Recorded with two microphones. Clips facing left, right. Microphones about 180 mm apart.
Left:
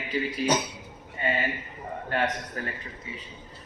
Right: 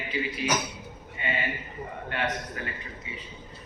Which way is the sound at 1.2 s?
40° left (ahead or behind).